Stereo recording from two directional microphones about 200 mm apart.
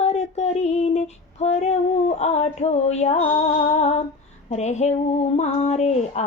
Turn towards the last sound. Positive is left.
turn(degrees=35)  # may be behind; listen again after turning